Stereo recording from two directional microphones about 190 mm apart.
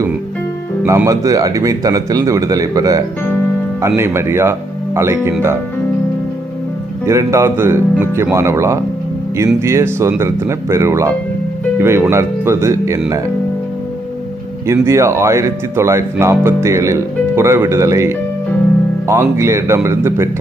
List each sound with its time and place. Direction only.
0.9 s speech: 15° right (ahead or behind)
7.0 s speech: 15° right (ahead or behind)
14.7 s speech: 15° right (ahead or behind)